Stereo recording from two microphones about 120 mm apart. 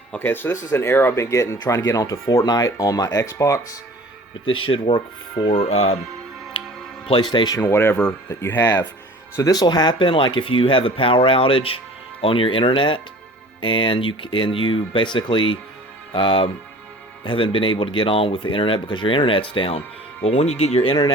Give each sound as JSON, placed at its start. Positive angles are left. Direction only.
{"t": 0.1, "sound": "speech", "side_deg": 15}
{"t": 4.5, "sound": "speech", "side_deg": 50}
{"t": 5.5, "sound": "speech", "side_deg": 60}
{"t": 6.5, "sound": "music", "side_deg": 45}
{"t": 7.1, "sound": "speech", "side_deg": 40}
{"t": 7.5, "sound": "speech", "side_deg": 25}
{"t": 9.3, "sound": "speech", "side_deg": 30}
{"t": 20.2, "sound": "speech", "side_deg": 60}